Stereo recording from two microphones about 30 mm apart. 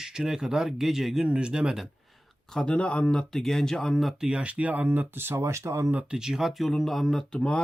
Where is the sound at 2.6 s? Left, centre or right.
Left.